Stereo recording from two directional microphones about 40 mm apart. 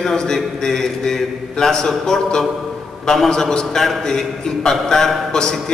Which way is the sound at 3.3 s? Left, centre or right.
Centre.